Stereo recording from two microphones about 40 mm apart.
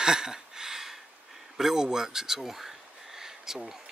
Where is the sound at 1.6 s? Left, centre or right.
Centre.